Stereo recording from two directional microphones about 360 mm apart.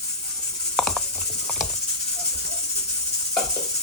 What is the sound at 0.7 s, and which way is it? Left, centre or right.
Ratchet, centre.